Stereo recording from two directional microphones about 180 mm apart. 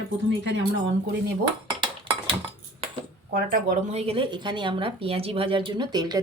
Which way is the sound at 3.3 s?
55° right (ahead or behind).